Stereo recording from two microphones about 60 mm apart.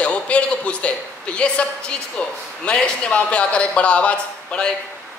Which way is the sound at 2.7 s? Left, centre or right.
Centre.